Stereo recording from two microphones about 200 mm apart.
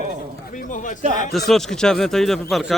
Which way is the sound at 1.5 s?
Centre (ahead or behind).